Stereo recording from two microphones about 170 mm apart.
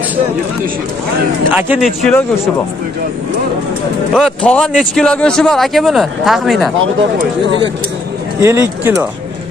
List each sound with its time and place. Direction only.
1.5 s speech: 10° right (ahead or behind)
4.1 s speech: 5° left (ahead or behind)
8.4 s speech: 15° right (ahead or behind)